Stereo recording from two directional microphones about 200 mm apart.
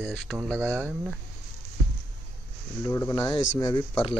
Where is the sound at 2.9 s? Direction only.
15° left (ahead or behind).